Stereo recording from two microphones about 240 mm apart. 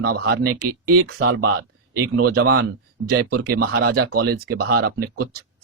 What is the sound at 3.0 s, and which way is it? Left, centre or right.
Speech, right.